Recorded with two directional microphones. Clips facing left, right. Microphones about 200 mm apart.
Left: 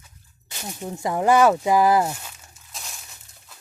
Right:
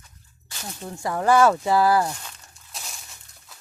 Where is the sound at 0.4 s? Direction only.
15° left (ahead or behind).